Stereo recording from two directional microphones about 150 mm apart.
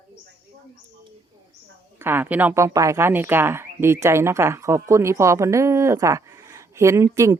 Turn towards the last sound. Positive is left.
turn(degrees=-20)  # may be behind; listen again after turning